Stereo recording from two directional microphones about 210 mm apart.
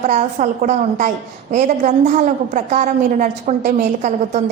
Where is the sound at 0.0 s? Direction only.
35° right (ahead or behind).